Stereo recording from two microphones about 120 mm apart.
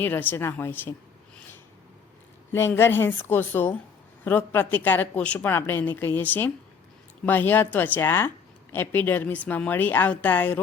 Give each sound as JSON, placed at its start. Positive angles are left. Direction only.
{"t": 0.0, "sound": "a woman's voice", "side_deg": 15}
{"t": 2.5, "sound": "a woman's voice", "side_deg": 20}